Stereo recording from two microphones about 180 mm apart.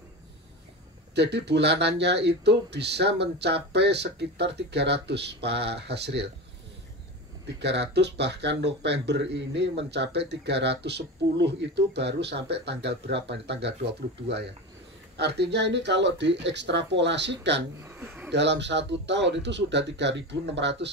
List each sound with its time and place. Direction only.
1.1 s speech: 70° right (ahead or behind)
7.4 s speech: 70° right (ahead or behind)
15.1 s speech: 70° right (ahead or behind)
17.7 s a man's voice: 10° right (ahead or behind)
18.3 s speech: 75° right (ahead or behind)